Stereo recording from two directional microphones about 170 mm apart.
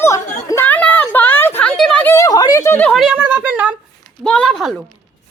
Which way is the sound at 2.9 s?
5° right (ahead or behind).